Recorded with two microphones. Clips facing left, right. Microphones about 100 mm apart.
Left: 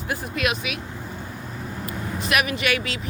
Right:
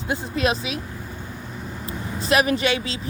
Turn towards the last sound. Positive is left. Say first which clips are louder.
# right 2 dB
turn(degrees=-25)  # may be behind; listen again after turning